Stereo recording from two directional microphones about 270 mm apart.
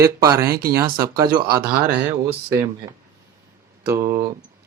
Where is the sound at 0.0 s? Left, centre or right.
Centre.